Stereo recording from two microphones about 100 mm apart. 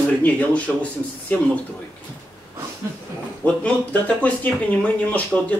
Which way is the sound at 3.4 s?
15° left (ahead or behind).